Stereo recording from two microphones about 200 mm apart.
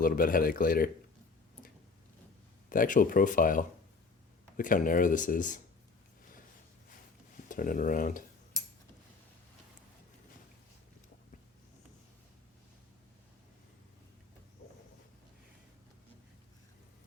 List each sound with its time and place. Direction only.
0.0 s speech: 45° left (ahead or behind)
2.6 s speech: 45° left (ahead or behind)
7.4 s speech: 40° left (ahead or behind)